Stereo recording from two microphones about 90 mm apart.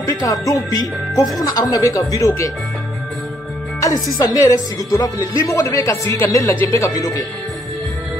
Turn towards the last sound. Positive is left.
turn(degrees=40)  # may be behind; listen again after turning